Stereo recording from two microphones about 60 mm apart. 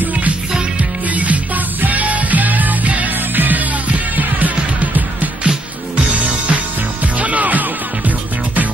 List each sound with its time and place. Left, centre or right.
0.0 s music: right
4.9 s music: right